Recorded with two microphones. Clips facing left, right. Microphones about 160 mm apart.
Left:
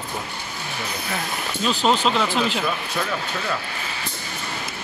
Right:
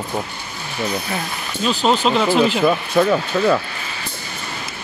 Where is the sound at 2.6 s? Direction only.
50° right (ahead or behind).